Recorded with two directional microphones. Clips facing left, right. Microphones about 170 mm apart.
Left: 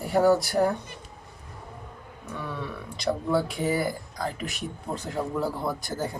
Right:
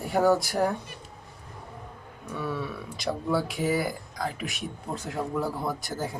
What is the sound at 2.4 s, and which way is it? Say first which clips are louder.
Speech: right 3 dB; 5° right (ahead or behind).